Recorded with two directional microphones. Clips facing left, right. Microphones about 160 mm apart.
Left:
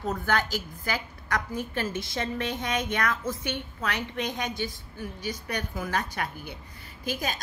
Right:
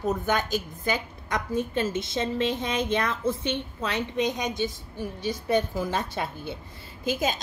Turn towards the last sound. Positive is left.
turn(degrees=-20)  # may be behind; listen again after turning